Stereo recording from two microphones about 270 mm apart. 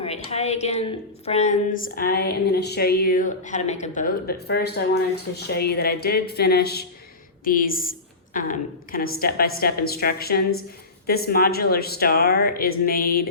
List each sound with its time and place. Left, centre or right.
0.0 s a woman's voice: left